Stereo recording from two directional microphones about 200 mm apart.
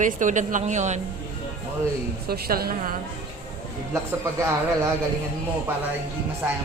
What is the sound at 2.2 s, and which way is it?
Speech, 50° right (ahead or behind).